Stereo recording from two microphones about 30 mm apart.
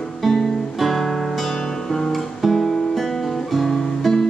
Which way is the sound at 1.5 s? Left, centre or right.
Centre.